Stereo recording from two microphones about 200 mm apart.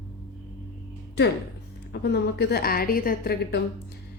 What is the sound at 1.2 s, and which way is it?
A woman's voice, 60° left (ahead or behind).